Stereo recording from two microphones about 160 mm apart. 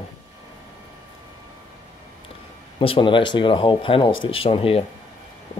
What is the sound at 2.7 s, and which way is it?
Speech, 35° left (ahead or behind).